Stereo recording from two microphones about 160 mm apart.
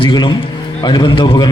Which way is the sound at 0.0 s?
30° left (ahead or behind).